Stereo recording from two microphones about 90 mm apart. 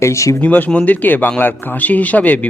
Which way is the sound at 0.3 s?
20° left (ahead or behind).